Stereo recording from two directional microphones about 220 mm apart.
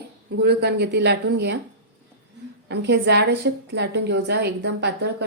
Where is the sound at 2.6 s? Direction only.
50° right (ahead or behind).